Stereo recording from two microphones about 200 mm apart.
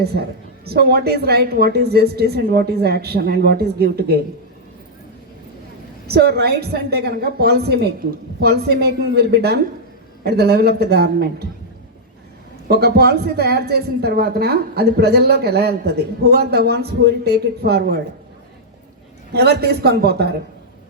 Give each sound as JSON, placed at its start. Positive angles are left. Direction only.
{"t": 0.0, "sound": "speech", "side_deg": -55}
{"t": 6.1, "sound": "speech", "side_deg": -50}
{"t": 12.6, "sound": "speech", "side_deg": -50}
{"t": 19.3, "sound": "speech", "side_deg": -55}